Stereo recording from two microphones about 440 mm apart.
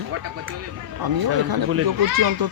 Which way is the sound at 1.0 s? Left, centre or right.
Right.